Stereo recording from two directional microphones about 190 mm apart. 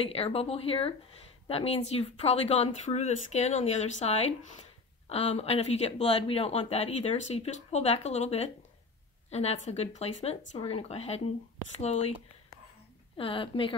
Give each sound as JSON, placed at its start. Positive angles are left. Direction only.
{"t": 0.1, "sound": "speech", "side_deg": 30}
{"t": 13.2, "sound": "a woman's voice", "side_deg": 25}